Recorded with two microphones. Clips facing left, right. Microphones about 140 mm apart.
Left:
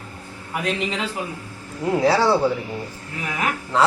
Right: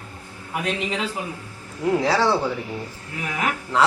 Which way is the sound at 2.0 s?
5° left (ahead or behind).